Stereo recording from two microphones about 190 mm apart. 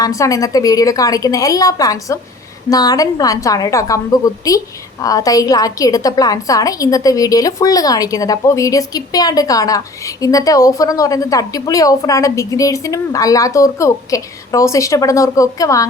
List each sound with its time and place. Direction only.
0.0 s a woman's voice: 15° left (ahead or behind)